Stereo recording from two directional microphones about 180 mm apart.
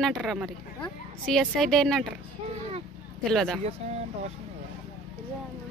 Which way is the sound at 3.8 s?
35° right (ahead or behind).